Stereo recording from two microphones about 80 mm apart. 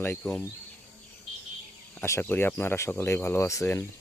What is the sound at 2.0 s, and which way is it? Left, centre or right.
Speech, left.